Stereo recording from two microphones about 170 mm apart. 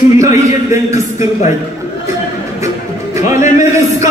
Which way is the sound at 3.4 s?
45° left (ahead or behind).